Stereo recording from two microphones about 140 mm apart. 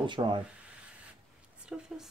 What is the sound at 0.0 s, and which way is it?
Speech, 35° right (ahead or behind).